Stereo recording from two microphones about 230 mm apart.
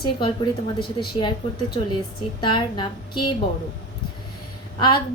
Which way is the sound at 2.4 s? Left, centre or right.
Centre.